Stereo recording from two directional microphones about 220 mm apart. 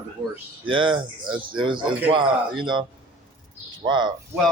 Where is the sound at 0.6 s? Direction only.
20° right (ahead or behind).